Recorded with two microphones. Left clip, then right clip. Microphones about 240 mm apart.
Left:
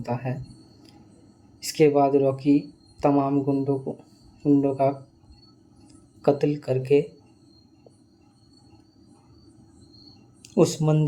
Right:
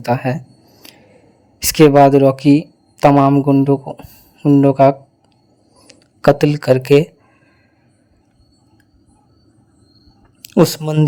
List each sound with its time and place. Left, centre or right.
0.0 s speech: right
0.8 s a sound: right
1.5 s speech: right
10.4 s speech: right